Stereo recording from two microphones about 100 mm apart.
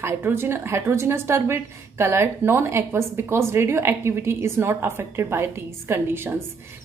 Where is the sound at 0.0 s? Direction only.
20° right (ahead or behind).